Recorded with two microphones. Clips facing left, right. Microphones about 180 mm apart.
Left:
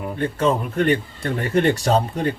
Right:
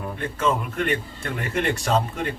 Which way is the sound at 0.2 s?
35° left (ahead or behind).